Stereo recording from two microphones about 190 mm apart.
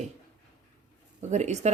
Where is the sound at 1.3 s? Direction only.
35° right (ahead or behind).